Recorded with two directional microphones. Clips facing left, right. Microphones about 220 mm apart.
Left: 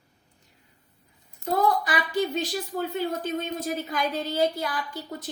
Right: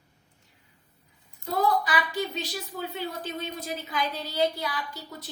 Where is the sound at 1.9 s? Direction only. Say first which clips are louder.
Left 3 dB; 50° left (ahead or behind).